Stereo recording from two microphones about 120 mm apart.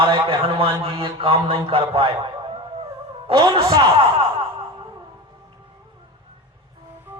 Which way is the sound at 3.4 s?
35° right (ahead or behind).